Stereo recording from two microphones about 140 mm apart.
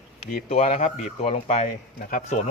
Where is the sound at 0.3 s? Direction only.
55° left (ahead or behind).